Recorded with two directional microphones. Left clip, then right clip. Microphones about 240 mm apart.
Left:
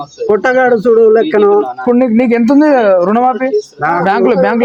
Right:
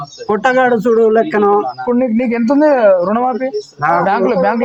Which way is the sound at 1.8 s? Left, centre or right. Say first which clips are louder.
Left 4 dB; left.